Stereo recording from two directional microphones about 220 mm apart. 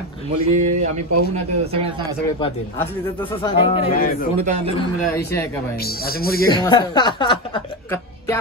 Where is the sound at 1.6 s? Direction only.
25° right (ahead or behind).